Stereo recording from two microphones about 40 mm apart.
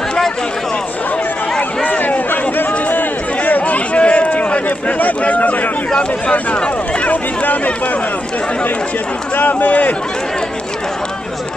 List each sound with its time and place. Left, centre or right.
1.9 s chatter: left
2.9 s a sound: left
5.9 s speech: left
9.4 s speech: left